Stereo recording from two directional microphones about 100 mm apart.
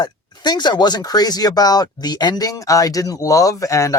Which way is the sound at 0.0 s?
45° left (ahead or behind).